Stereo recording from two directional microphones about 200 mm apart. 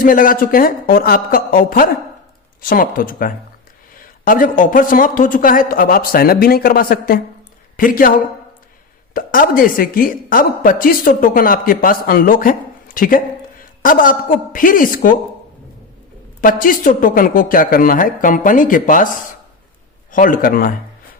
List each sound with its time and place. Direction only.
0.0 s a woman's voice: 45° left (ahead or behind)
9.1 s a woman's voice: 45° left (ahead or behind)
16.4 s a woman's voice: 45° left (ahead or behind)
20.1 s a woman's voice: 40° left (ahead or behind)